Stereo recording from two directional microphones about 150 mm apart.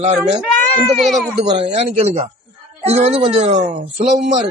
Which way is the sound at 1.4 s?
50° right (ahead or behind).